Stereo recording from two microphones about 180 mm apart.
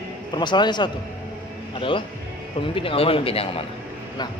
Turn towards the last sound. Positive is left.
turn(degrees=30)  # may be behind; listen again after turning